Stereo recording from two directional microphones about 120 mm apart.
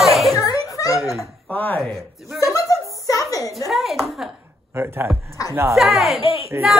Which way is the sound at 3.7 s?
Centre (ahead or behind).